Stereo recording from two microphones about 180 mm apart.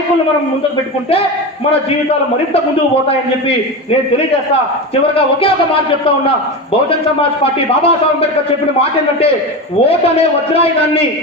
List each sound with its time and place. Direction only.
5.1 s a man's voice: 30° left (ahead or behind)